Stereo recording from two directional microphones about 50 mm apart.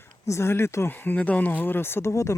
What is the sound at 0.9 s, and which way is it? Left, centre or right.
Speech, left.